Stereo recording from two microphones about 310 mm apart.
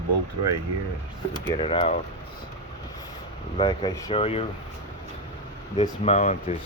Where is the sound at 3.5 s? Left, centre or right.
Centre.